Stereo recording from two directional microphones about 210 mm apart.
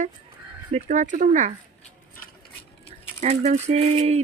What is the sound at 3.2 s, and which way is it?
Speech, 30° right (ahead or behind).